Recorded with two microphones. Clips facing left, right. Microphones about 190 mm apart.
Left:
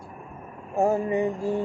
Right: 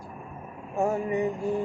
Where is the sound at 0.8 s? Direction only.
30° left (ahead or behind).